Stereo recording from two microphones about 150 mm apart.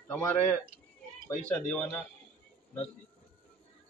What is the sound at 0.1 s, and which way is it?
Speech, 10° left (ahead or behind).